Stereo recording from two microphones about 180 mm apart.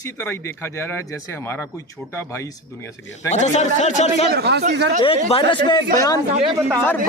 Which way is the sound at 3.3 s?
40° left (ahead or behind).